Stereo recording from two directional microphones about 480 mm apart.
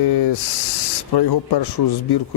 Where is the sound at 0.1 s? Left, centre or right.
Left.